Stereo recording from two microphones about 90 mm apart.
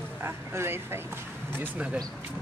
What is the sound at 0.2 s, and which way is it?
Speech, 30° right (ahead or behind).